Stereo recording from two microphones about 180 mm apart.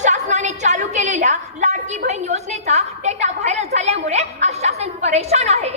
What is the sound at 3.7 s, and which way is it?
A woman's voice, 35° right (ahead or behind).